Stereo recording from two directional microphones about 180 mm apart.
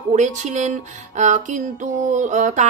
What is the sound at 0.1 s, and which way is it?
A woman's voice, 40° right (ahead or behind).